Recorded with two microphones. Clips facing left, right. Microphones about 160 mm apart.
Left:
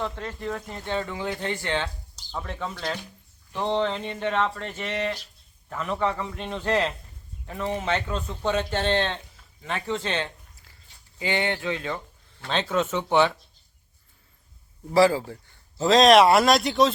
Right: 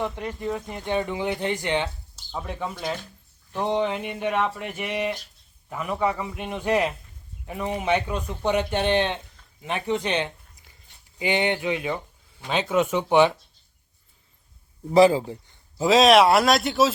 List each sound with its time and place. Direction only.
0.0 s speech: 15° right (ahead or behind)
14.9 s speech: 20° right (ahead or behind)
15.8 s speech: 5° right (ahead or behind)